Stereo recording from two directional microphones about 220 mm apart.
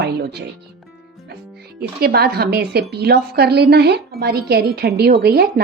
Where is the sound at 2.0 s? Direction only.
45° right (ahead or behind).